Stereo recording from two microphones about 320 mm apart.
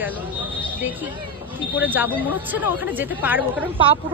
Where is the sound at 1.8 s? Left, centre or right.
Centre.